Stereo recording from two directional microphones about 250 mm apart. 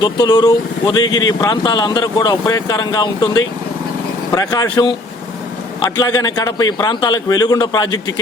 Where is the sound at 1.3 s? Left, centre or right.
Centre.